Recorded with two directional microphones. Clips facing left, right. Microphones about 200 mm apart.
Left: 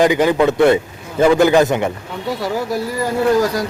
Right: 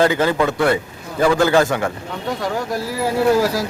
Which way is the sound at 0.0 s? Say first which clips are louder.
Left 3 dB; 15° left (ahead or behind).